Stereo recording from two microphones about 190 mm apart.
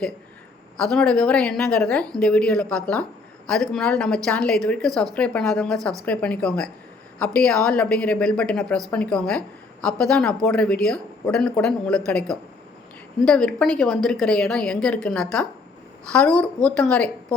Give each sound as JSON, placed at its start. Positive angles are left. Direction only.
{"t": 0.8, "sound": "a woman's voice", "side_deg": 5}